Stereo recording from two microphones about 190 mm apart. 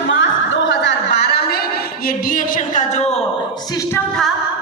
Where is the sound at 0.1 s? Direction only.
70° left (ahead or behind).